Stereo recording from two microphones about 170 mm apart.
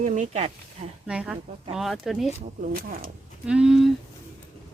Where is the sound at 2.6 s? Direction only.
60° right (ahead or behind).